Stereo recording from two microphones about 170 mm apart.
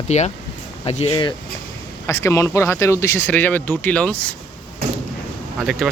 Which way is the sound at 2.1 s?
20° left (ahead or behind).